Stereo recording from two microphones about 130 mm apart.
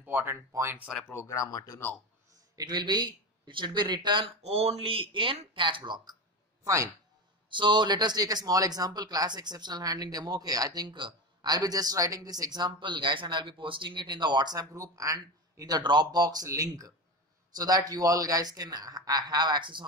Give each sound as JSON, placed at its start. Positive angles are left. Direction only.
{"t": 0.0, "sound": "speech", "side_deg": -15}
{"t": 1.1, "sound": "speech", "side_deg": 25}
{"t": 2.5, "sound": "speech", "side_deg": -35}
{"t": 4.4, "sound": "speech", "side_deg": -50}
{"t": 6.6, "sound": "speech", "side_deg": -25}
{"t": 7.4, "sound": "speech", "side_deg": -35}